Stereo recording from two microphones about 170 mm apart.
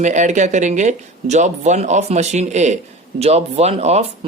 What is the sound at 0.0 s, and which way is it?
Speech, 45° right (ahead or behind).